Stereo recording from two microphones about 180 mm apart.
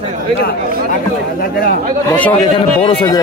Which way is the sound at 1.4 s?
55° left (ahead or behind).